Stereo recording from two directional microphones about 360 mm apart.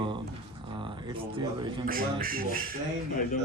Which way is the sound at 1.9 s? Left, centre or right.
Right.